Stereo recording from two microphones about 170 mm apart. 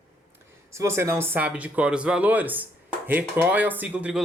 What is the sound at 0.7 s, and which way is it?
Speech, 15° right (ahead or behind).